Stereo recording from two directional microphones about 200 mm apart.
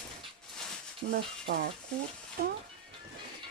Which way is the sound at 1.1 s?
55° right (ahead or behind).